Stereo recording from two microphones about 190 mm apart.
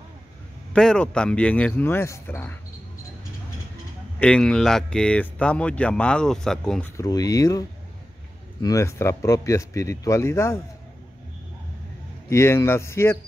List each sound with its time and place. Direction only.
0.7 s speech: 5° left (ahead or behind)
4.2 s speech: 5° left (ahead or behind)
7.0 s speech: 20° left (ahead or behind)
8.6 s speech: 15° left (ahead or behind)
12.3 s speech: 15° left (ahead or behind)